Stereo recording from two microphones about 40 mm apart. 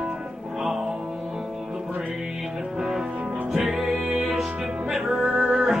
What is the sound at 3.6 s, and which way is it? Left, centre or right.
Music, centre.